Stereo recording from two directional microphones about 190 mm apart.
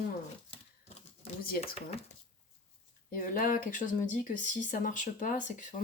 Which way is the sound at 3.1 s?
45° left (ahead or behind).